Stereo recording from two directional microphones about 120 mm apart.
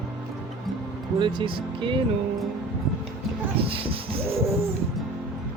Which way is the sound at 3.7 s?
50° right (ahead or behind).